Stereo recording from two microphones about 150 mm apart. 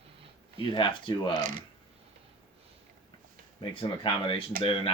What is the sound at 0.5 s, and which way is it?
Speech, 35° left (ahead or behind).